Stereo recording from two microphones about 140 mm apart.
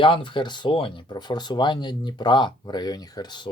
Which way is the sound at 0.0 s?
35° left (ahead or behind).